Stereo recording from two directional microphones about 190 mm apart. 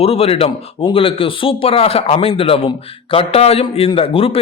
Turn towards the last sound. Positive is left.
turn(degrees=30)  # may be behind; listen again after turning